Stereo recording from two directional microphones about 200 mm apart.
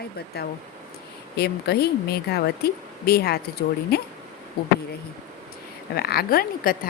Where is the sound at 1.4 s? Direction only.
55° left (ahead or behind).